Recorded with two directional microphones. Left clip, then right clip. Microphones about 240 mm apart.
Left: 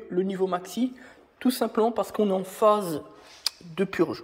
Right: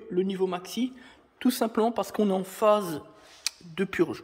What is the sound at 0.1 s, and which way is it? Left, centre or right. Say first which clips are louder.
A woman's voice: left 1 dB; centre.